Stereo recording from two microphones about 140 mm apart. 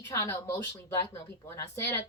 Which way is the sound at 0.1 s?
20° left (ahead or behind).